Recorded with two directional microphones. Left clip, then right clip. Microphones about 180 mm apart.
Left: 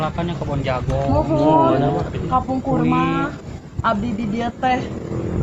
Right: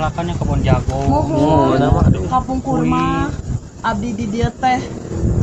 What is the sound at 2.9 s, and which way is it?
Speech, 20° left (ahead or behind).